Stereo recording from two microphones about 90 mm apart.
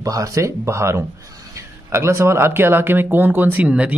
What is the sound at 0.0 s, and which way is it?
Speech, 40° right (ahead or behind).